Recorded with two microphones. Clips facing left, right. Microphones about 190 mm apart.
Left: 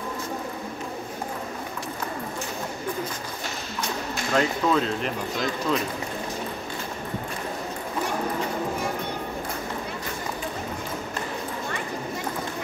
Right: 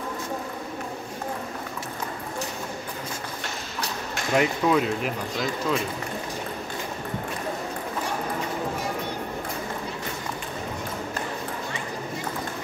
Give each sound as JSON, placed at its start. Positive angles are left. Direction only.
{"t": 4.3, "sound": "speech", "side_deg": -15}